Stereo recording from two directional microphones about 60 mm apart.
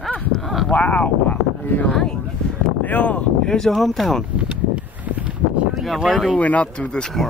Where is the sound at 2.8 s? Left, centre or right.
Left.